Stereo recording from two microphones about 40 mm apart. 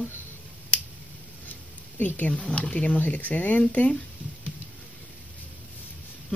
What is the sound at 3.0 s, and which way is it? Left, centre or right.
Speech, left.